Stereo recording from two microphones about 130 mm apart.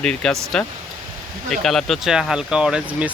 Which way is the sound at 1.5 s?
5° left (ahead or behind).